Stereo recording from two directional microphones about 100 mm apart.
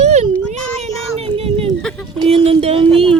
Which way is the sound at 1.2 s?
75° right (ahead or behind).